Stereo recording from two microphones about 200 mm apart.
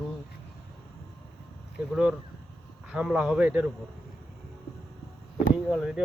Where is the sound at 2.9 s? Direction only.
5° right (ahead or behind).